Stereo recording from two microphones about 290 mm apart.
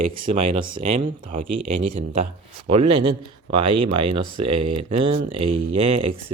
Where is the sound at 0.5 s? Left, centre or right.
Right.